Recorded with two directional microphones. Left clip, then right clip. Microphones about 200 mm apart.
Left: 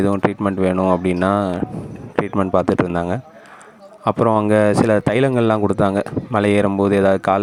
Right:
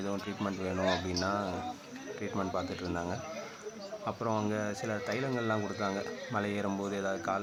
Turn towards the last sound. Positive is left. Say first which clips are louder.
# left 19 dB
turn(degrees=50)  # may be behind; listen again after turning